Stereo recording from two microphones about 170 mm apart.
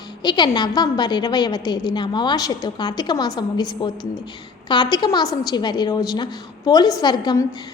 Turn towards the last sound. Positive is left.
turn(degrees=25)  # may be behind; listen again after turning